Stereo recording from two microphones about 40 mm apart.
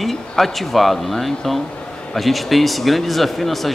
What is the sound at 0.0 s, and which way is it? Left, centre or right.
Speech, centre.